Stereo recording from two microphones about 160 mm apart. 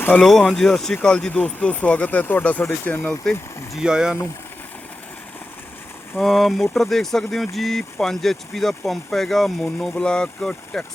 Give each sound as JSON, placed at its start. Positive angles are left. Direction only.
{"t": 0.0, "sound": "speech", "side_deg": 5}
{"t": 3.8, "sound": "speech", "side_deg": -5}
{"t": 6.1, "sound": "speech", "side_deg": 0}